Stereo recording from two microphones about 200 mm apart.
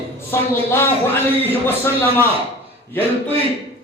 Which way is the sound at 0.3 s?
10° left (ahead or behind).